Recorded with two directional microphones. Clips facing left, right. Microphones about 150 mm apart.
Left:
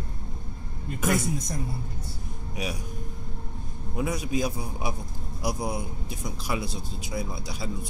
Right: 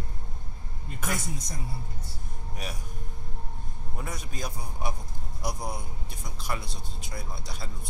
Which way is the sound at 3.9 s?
5° left (ahead or behind).